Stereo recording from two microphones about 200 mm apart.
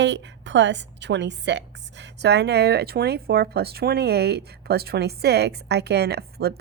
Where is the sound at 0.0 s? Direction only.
60° right (ahead or behind).